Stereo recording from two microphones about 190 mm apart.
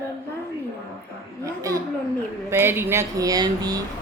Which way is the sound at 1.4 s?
15° right (ahead or behind).